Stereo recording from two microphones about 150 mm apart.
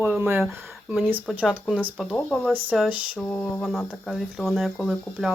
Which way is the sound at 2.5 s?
10° right (ahead or behind).